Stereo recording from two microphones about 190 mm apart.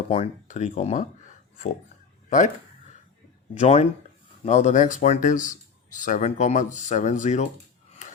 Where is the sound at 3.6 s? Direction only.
35° left (ahead or behind).